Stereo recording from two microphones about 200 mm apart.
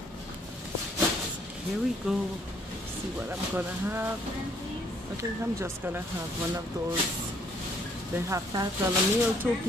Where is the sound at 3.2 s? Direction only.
10° right (ahead or behind).